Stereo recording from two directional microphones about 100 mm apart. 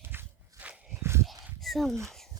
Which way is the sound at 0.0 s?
20° right (ahead or behind).